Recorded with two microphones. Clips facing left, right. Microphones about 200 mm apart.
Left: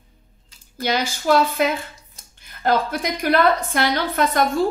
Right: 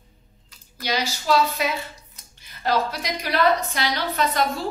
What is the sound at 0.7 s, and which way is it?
A woman's voice, 50° left (ahead or behind).